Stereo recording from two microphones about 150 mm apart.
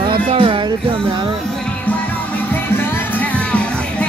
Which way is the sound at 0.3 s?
35° right (ahead or behind).